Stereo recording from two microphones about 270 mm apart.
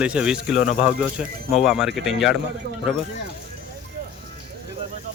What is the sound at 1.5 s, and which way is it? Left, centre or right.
Speech, centre.